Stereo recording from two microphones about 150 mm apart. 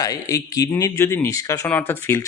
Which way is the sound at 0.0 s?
25° left (ahead or behind).